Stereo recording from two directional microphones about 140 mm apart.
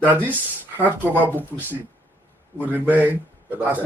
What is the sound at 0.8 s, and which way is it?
A man's voice, 10° right (ahead or behind).